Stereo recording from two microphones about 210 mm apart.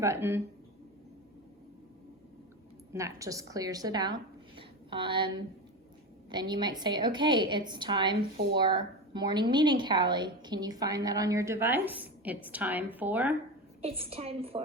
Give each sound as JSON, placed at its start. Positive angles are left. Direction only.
{"t": 0.0, "sound": "a woman's voice", "side_deg": -10}
{"t": 2.9, "sound": "a woman's voice", "side_deg": -15}
{"t": 13.8, "sound": "a woman's voice", "side_deg": -25}